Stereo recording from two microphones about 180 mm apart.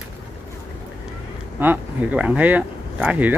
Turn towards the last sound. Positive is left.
turn(degrees=-10)  # may be behind; listen again after turning